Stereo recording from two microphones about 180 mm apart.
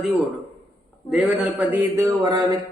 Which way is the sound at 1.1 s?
10° right (ahead or behind).